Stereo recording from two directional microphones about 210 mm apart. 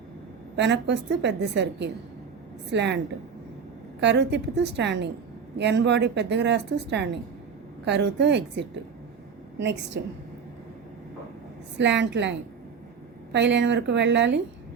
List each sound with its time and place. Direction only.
0.5 s a woman's voice: 55° right (ahead or behind)
4.0 s a woman's voice: 55° right (ahead or behind)
11.8 s a woman's voice: 55° right (ahead or behind)